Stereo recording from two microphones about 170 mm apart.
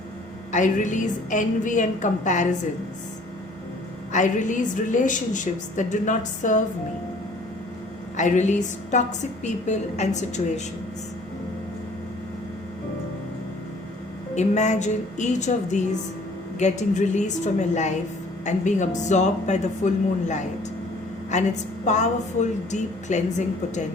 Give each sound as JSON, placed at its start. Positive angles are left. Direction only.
{"t": 0.5, "sound": "a woman's voice", "side_deg": 45}
{"t": 4.1, "sound": "a woman's voice", "side_deg": 45}
{"t": 8.1, "sound": "a woman's voice", "side_deg": 45}
{"t": 14.3, "sound": "a woman's voice", "side_deg": 45}